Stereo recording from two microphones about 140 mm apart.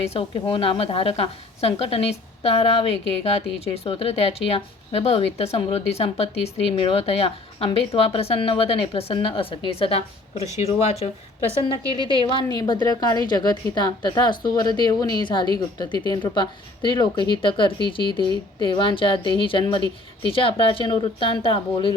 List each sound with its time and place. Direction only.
0.0 s speech: 45° left (ahead or behind)
12.1 s a woman's voice: 35° left (ahead or behind)